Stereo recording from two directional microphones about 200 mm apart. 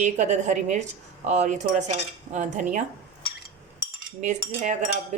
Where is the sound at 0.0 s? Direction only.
35° right (ahead or behind).